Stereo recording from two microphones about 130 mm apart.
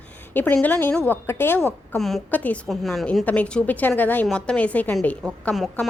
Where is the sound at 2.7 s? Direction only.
Centre (ahead or behind).